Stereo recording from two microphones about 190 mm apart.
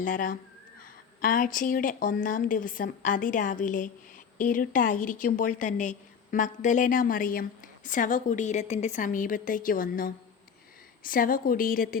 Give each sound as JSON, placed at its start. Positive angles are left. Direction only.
{"t": 0.0, "sound": "a woman's voice", "side_deg": 45}